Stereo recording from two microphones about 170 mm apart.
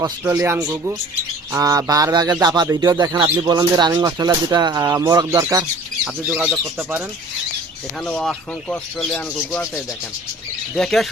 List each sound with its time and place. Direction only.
0.0 s speech: 15° right (ahead or behind)
6.2 s speech: 5° right (ahead or behind)
8.0 s speech: 5° left (ahead or behind)
10.8 s speech: centre (ahead or behind)